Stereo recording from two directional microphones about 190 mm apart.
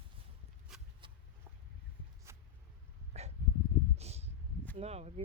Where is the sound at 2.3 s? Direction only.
15° right (ahead or behind).